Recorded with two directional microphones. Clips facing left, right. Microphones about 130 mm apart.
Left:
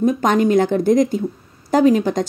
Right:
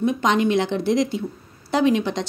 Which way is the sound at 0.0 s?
45° left (ahead or behind).